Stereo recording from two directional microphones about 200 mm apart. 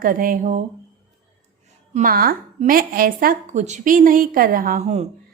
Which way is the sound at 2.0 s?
45° right (ahead or behind).